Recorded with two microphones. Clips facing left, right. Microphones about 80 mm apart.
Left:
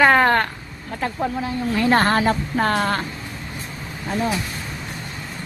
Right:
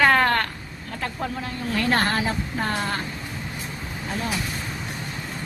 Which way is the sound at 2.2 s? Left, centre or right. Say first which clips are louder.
Left 6 dB; left.